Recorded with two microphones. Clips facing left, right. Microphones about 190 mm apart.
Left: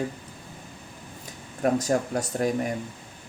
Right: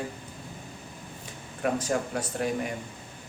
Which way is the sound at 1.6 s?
40° left (ahead or behind).